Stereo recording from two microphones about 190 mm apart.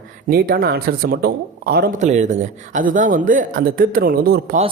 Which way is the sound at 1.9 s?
40° right (ahead or behind).